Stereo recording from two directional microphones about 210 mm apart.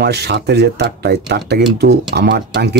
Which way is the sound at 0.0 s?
50° right (ahead or behind).